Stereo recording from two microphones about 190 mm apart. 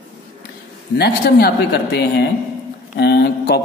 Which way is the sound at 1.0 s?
55° left (ahead or behind).